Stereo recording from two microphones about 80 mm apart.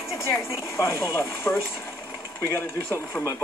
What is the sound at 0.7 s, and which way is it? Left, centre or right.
Speech, left.